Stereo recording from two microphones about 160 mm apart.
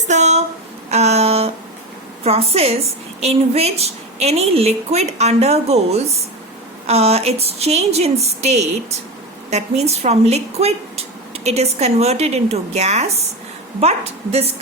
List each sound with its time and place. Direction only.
0.1 s a woman's voice: 45° right (ahead or behind)
0.9 s a sound: 40° right (ahead or behind)
2.2 s a woman's voice: 40° right (ahead or behind)